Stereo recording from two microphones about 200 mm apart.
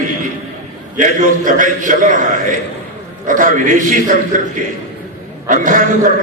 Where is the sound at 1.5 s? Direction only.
40° right (ahead or behind).